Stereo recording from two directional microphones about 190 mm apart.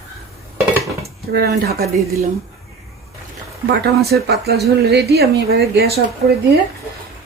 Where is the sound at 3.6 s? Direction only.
60° right (ahead or behind).